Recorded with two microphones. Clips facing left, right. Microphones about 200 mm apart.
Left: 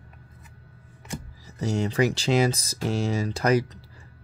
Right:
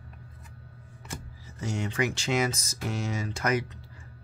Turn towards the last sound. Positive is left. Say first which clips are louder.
# left 6 dB
turn(degrees=35)  # may be behind; listen again after turning